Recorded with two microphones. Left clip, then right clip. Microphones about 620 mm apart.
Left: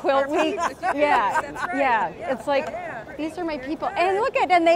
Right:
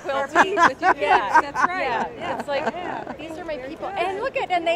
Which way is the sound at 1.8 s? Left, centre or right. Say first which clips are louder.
Left 3 dB; left.